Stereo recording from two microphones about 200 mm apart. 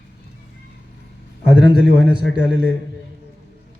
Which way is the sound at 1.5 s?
55° right (ahead or behind).